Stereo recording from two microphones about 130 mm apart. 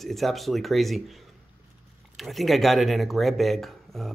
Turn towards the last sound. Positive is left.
turn(degrees=0)  # may be behind; listen again after turning